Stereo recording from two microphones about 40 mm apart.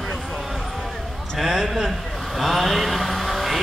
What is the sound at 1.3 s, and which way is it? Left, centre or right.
Speech, centre.